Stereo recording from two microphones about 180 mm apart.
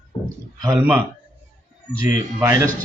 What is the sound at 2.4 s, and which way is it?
Speech, 15° right (ahead or behind).